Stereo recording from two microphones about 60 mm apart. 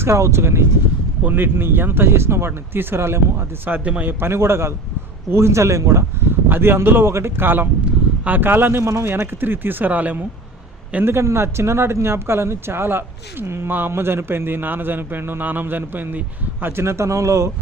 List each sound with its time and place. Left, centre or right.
0.0 s speech: right
1.2 s a man's voice: right
3.7 s a man's voice: right
4.2 s speech: right
6.5 s a man's voice: right
8.8 s a man's voice: right
11.0 s a man's voice: right